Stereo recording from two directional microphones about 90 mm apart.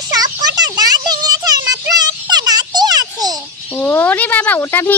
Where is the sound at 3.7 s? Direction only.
25° left (ahead or behind).